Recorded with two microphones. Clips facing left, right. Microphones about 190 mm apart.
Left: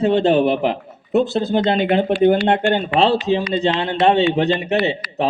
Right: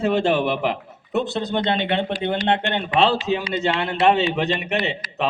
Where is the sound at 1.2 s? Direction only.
5° left (ahead or behind).